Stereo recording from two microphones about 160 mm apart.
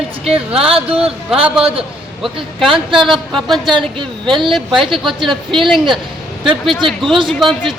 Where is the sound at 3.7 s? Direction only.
30° right (ahead or behind).